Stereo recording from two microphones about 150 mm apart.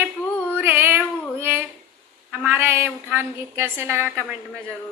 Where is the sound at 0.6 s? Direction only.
15° right (ahead or behind).